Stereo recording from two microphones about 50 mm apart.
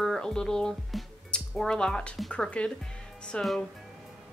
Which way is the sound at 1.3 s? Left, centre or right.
Centre.